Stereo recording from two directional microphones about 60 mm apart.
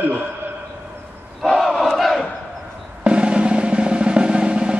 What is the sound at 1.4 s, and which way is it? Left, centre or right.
Crowd, centre.